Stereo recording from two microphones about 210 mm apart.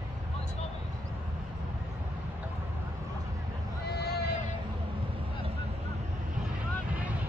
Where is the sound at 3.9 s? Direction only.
50° left (ahead or behind).